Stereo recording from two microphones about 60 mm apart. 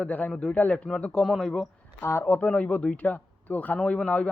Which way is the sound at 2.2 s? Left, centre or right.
Left.